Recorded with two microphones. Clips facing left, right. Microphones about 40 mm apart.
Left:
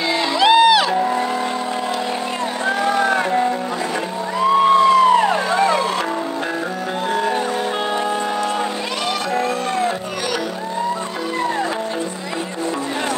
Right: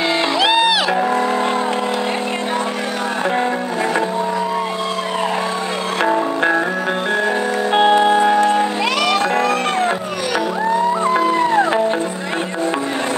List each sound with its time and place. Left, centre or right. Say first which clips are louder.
0.4 s music: left 5 dB; centre
8.2 s music: right 8 dB; right